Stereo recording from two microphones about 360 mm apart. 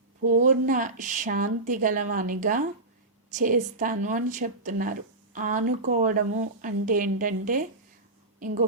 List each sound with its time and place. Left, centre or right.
0.3 s a woman's voice: right